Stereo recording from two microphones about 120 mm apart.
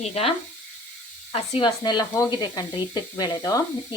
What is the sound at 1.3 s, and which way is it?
Frying, 50° left (ahead or behind).